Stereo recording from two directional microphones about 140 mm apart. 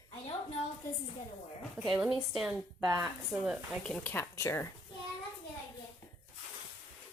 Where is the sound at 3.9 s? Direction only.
10° left (ahead or behind).